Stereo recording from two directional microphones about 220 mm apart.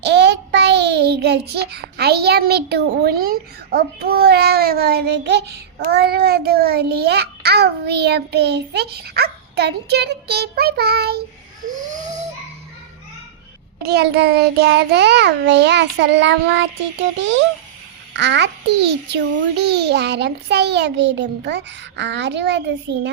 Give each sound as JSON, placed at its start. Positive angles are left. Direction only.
{"t": 0.0, "sound": "child singing", "side_deg": -50}
{"t": 5.9, "sound": "a child's voice", "side_deg": -45}
{"t": 13.8, "sound": "a child's voice", "side_deg": -50}